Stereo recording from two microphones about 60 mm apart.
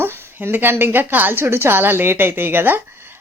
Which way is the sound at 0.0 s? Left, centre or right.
Right.